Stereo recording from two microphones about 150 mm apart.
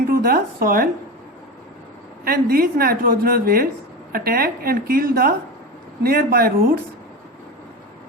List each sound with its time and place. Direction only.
0.1 s speech: 75° right (ahead or behind)
2.2 s a woman's voice: 85° right